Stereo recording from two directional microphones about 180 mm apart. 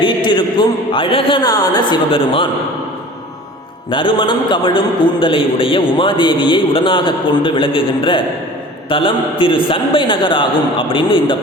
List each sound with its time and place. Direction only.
0.0 s a sound: 25° left (ahead or behind)
0.9 s a man's voice: 30° left (ahead or behind)
3.8 s a man's voice: 25° left (ahead or behind)